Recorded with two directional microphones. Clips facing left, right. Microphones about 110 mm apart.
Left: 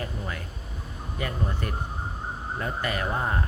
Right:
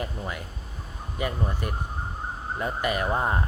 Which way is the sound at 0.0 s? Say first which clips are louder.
Right 1 dB; 15° right (ahead or behind).